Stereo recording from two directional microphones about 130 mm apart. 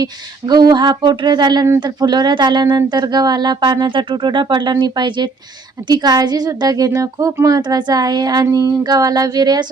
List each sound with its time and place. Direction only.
0.0 s speech: 30° right (ahead or behind)